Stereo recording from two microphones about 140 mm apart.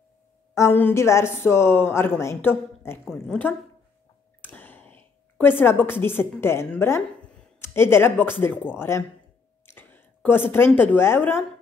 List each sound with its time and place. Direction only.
0.6 s a woman's voice: 15° left (ahead or behind)
3.1 s a woman's voice: 5° left (ahead or behind)
4.4 s a sound: 15° left (ahead or behind)
6.4 s a woman's voice: 20° left (ahead or behind)